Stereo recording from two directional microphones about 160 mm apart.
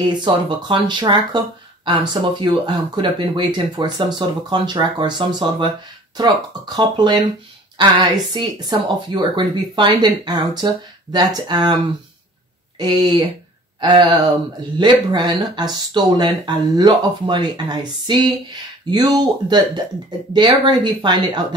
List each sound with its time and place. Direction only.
0.2 s speech: 30° right (ahead or behind)
2.4 s speech: 30° right (ahead or behind)
12.7 s speech: 25° right (ahead or behind)